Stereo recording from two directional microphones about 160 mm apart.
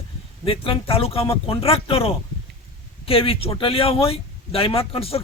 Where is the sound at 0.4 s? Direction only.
35° left (ahead or behind).